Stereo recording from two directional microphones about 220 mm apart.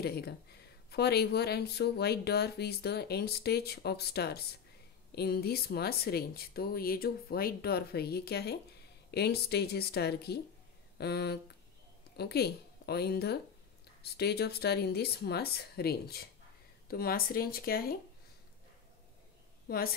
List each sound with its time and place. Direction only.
0.0 s a woman's voice: 45° left (ahead or behind)
19.7 s speech: 45° left (ahead or behind)